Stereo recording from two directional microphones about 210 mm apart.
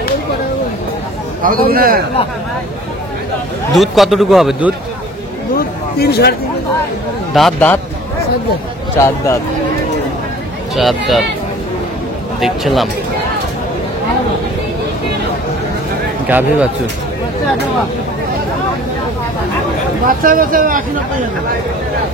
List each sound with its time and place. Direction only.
1.4 s a man's voice: 45° right (ahead or behind)
3.7 s a man's voice: centre (ahead or behind)
5.9 s speech: 50° left (ahead or behind)
7.3 s a man's voice: 5° left (ahead or behind)
9.0 s speech: 10° left (ahead or behind)
10.8 s a man's voice: centre (ahead or behind)
12.4 s a man's voice: centre (ahead or behind)
16.3 s speech: 10° right (ahead or behind)
20.1 s speech: 40° right (ahead or behind)